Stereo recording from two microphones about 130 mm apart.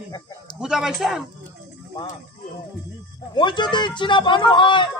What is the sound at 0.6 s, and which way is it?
Speech, 5° right (ahead or behind).